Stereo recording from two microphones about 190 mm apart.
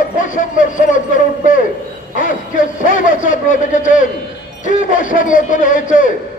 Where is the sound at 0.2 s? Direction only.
45° left (ahead or behind).